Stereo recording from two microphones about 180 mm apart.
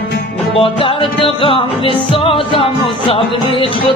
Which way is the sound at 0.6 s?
30° left (ahead or behind).